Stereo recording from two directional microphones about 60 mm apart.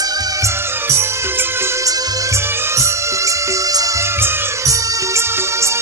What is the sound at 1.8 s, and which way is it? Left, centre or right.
Music, right.